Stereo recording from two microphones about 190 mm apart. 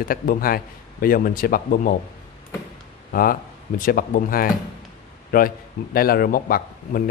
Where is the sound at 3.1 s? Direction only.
50° left (ahead or behind).